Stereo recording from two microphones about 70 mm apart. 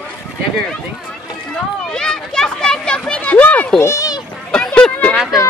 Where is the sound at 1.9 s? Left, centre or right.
Centre.